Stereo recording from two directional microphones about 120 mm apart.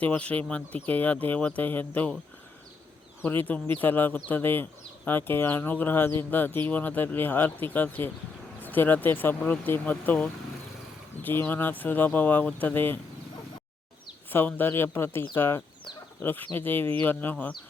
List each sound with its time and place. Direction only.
0.0 s speech: 10° left (ahead or behind)
3.2 s speech: 15° left (ahead or behind)
14.3 s speech: 15° left (ahead or behind)